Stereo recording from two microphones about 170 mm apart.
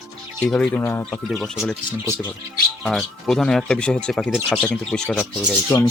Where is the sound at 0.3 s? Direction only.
5° left (ahead or behind).